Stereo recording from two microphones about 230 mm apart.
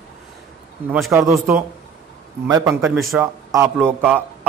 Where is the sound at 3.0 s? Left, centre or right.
Centre.